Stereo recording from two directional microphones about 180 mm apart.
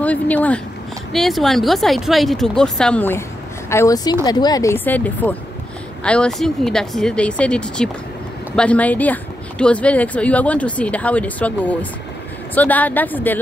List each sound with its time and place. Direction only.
0.0 s speech: 10° left (ahead or behind)